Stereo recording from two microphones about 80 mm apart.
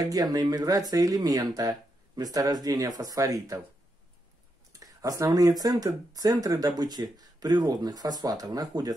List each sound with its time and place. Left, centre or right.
0.0 s speech: right
4.7 s speech: right